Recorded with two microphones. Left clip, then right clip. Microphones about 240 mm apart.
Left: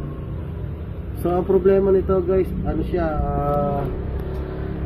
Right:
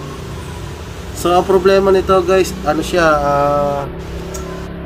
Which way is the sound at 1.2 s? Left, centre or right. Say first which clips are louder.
Right 6 dB; right.